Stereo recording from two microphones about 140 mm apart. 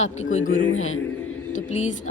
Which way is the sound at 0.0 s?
55° left (ahead or behind).